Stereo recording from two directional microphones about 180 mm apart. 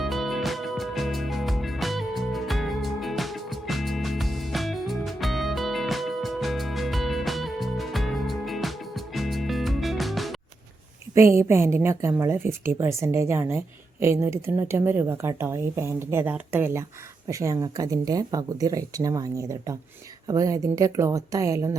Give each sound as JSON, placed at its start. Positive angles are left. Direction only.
{"t": 0.0, "sound": "music", "side_deg": 0}
{"t": 11.3, "sound": "a woman's voice", "side_deg": -15}